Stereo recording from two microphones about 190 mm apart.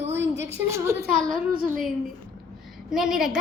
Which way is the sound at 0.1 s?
70° right (ahead or behind).